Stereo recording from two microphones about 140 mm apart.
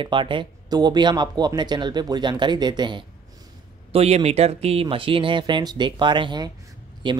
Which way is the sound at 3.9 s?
50° right (ahead or behind).